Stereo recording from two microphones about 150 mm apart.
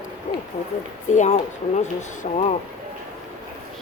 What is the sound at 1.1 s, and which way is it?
Speech, 50° left (ahead or behind).